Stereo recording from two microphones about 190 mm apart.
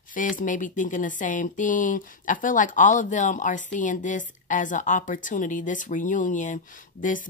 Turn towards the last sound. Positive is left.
turn(degrees=45)  # may be behind; listen again after turning